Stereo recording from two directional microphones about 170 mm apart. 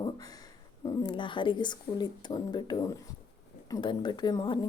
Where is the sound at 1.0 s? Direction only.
30° left (ahead or behind).